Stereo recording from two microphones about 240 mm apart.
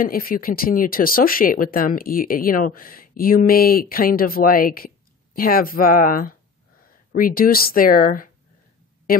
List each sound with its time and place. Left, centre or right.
0.0 s speech: left